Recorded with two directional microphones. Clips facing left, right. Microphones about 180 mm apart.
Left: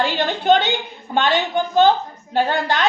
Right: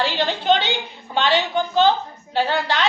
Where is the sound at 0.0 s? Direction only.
50° left (ahead or behind).